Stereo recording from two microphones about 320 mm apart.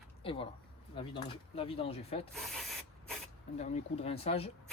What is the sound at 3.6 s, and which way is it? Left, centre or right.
Speech, left.